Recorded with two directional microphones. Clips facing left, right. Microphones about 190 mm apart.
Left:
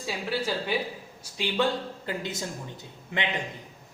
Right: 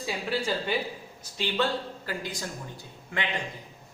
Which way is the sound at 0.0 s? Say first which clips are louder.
Even; 5° left (ahead or behind).